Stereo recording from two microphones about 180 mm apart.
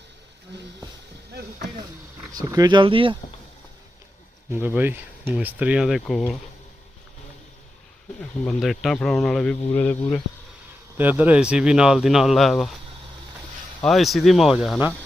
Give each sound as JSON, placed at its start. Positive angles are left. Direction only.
{"t": 1.3, "sound": "boat", "side_deg": -60}
{"t": 2.5, "sound": "speech", "side_deg": -20}
{"t": 4.5, "sound": "speech", "side_deg": -10}
{"t": 8.2, "sound": "speech", "side_deg": 0}
{"t": 10.9, "sound": "speech", "side_deg": -10}
{"t": 13.8, "sound": "speech", "side_deg": 0}